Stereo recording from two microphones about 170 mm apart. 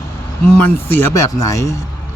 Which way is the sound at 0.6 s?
10° left (ahead or behind).